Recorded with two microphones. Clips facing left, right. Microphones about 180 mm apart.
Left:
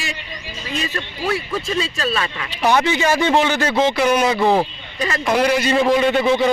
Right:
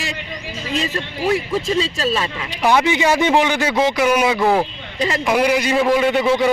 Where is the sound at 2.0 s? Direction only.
25° right (ahead or behind).